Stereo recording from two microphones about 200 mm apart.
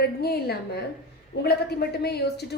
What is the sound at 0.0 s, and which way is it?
Speech, 50° left (ahead or behind).